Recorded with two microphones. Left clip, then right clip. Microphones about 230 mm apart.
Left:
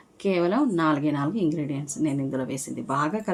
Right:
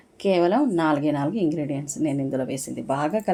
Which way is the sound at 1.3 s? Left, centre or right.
Centre.